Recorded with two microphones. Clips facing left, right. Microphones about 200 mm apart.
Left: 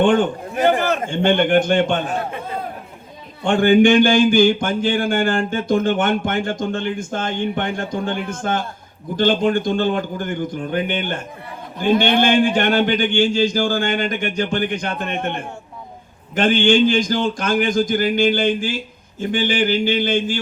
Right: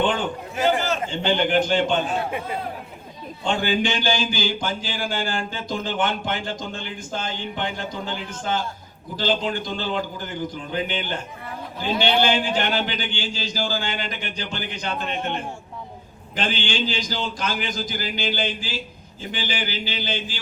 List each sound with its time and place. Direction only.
0.0 s a man's voice: 55° left (ahead or behind)
3.4 s a man's voice: 55° left (ahead or behind)